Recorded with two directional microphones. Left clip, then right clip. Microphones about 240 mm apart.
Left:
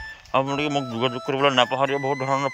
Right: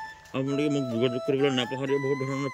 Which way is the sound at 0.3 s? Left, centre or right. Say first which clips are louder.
Left 6 dB; centre.